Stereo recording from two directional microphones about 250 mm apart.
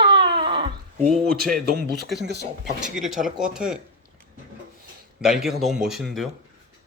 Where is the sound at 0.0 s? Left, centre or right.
Centre.